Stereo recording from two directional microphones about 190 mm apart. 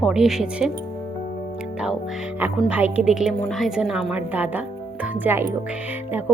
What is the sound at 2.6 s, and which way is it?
A woman's voice, 10° right (ahead or behind).